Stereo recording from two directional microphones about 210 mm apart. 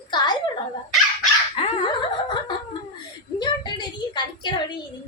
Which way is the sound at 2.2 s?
20° left (ahead or behind).